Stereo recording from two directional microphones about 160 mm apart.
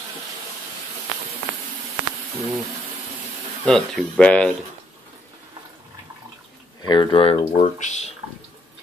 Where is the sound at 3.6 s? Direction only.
5° left (ahead or behind).